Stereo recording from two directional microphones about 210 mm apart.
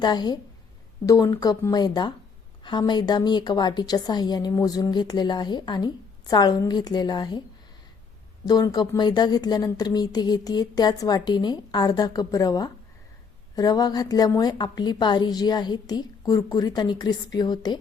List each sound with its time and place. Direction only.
0.0 s speech: 20° left (ahead or behind)
8.4 s speech: 20° left (ahead or behind)